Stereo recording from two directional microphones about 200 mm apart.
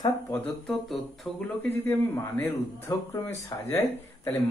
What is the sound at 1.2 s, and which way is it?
Speech, centre (ahead or behind).